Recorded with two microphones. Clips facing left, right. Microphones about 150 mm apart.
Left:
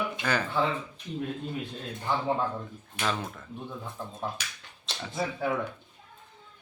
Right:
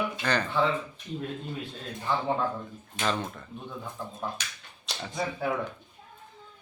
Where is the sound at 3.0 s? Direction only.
Centre (ahead or behind).